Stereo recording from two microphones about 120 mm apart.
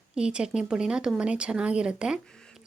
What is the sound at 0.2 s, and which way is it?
Speech, 5° right (ahead or behind).